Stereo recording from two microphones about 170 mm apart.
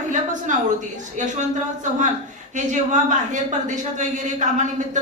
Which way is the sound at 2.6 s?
45° right (ahead or behind).